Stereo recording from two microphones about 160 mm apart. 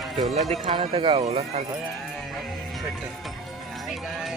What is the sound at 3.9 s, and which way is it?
Music, centre (ahead or behind).